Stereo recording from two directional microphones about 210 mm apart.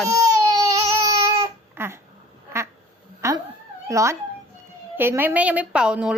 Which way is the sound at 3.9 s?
15° right (ahead or behind).